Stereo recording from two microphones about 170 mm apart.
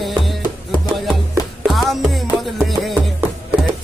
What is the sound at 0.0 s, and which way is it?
Music, centre (ahead or behind).